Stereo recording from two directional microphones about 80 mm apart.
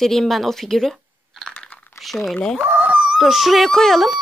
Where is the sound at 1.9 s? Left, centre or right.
Centre.